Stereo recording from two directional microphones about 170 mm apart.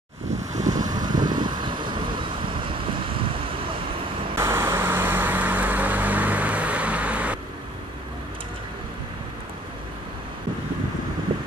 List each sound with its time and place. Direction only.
0.7 s vehicle: 20° right (ahead or behind)
4.4 s vehicle: 15° right (ahead or behind)